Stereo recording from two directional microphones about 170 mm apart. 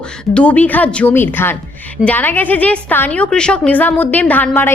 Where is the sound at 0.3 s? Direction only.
10° left (ahead or behind).